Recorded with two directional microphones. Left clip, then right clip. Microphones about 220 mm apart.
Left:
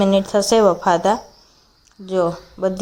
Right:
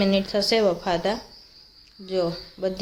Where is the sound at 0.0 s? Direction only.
20° left (ahead or behind).